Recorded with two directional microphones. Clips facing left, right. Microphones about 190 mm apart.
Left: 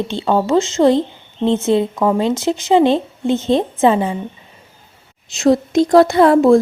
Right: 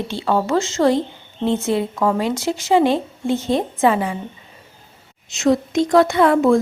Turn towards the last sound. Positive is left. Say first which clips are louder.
# left 4 dB
turn(degrees=35)  # may be behind; listen again after turning